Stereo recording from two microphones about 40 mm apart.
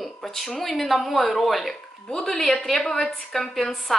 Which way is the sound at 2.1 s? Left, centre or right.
Centre.